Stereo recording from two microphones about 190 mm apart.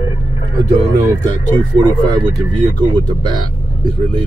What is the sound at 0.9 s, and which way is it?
Speech, 20° right (ahead or behind).